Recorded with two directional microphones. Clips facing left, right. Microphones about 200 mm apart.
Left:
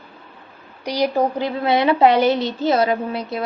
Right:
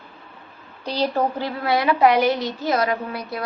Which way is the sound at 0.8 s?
15° left (ahead or behind).